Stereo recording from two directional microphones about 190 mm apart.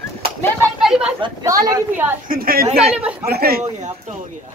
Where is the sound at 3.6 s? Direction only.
40° right (ahead or behind).